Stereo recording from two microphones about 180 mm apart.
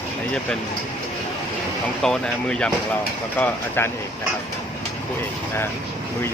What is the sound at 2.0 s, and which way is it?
Speech, 5° left (ahead or behind).